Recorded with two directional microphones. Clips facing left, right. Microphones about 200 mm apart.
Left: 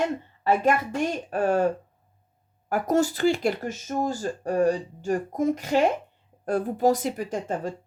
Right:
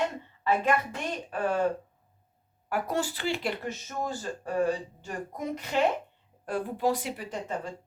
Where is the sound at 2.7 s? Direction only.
45° left (ahead or behind).